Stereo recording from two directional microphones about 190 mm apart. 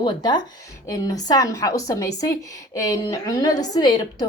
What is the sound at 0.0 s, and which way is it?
A woman's voice, 20° left (ahead or behind).